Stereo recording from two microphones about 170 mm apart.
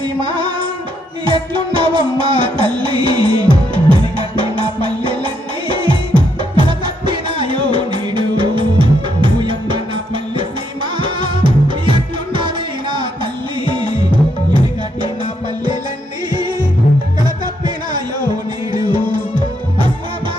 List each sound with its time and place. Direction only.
0.0 s music: 30° right (ahead or behind)
11.0 s music: 30° right (ahead or behind)
13.7 s music: 30° right (ahead or behind)
16.3 s music: 25° right (ahead or behind)
18.7 s music: 30° right (ahead or behind)